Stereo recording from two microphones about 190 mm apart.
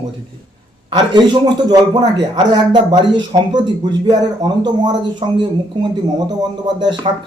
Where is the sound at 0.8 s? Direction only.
25° right (ahead or behind).